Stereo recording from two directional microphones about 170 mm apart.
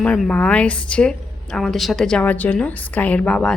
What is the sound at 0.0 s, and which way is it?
A woman's voice, 5° left (ahead or behind).